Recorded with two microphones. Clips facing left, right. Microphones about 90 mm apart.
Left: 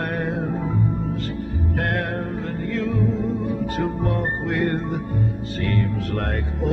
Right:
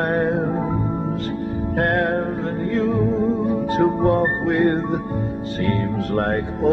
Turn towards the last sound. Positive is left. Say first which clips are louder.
# right 6 dB
turn(degrees=-30)  # may be behind; listen again after turning